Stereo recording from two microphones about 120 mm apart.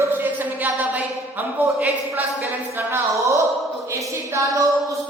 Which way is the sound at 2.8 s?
20° right (ahead or behind).